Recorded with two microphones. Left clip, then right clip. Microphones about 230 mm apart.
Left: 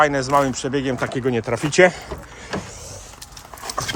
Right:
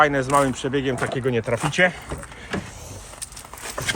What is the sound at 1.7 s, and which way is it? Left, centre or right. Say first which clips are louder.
Speech: left 6 dB; left.